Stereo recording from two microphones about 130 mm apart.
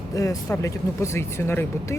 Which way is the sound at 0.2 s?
25° left (ahead or behind).